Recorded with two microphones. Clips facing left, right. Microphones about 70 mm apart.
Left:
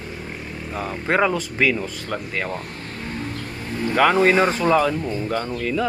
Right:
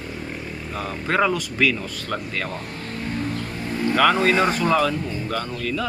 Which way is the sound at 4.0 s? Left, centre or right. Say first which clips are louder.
Left 2 dB; left.